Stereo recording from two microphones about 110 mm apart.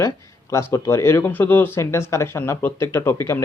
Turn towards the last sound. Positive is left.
turn(degrees=25)  # may be behind; listen again after turning